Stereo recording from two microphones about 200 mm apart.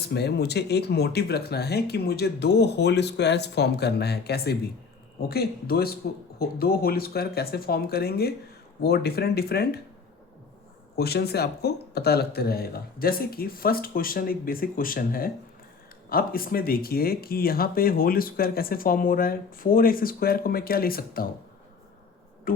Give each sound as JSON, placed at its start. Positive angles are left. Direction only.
{"t": 0.0, "sound": "speech", "side_deg": 55}
{"t": 10.9, "sound": "speech", "side_deg": 55}
{"t": 22.5, "sound": "a sound", "side_deg": 45}